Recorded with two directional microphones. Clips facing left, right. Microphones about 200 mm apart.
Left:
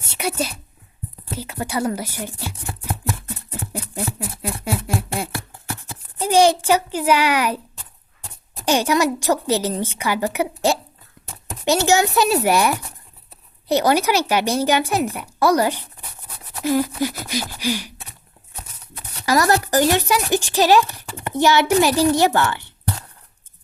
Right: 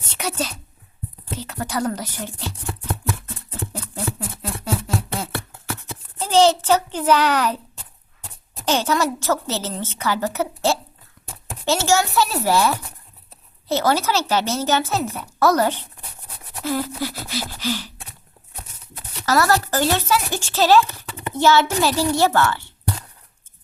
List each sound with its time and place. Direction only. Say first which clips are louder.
0.0 s a woman's voice: left 2 dB; 10° left (ahead or behind)
3.7 s a sound: left 3 dB; 10° left (ahead or behind)
4.4 s a woman's voice: left 1 dB; 10° left (ahead or behind)
8.6 s a woman's voice: left 2 dB; 15° left (ahead or behind)
19.2 s a woman's voice: left 1 dB; 15° left (ahead or behind)